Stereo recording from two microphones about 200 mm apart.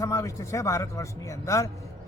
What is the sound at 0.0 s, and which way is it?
A man's voice, 15° left (ahead or behind).